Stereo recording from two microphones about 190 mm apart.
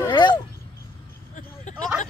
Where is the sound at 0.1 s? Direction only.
25° left (ahead or behind).